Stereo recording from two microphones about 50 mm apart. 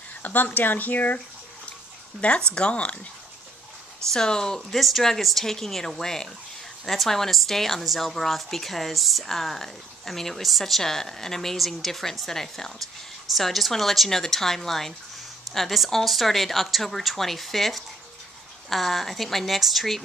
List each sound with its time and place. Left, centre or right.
0.2 s speech: left
2.5 s speech: left
4.1 s speech: centre
4.6 s a woman's voice: centre